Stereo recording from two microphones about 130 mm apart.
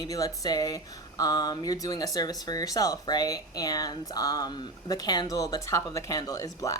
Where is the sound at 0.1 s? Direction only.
25° left (ahead or behind).